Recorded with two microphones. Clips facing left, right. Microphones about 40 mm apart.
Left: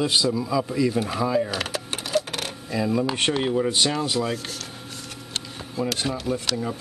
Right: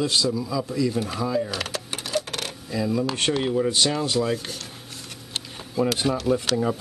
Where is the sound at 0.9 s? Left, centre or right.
Centre.